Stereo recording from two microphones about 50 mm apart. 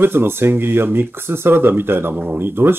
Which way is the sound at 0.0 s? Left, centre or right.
Right.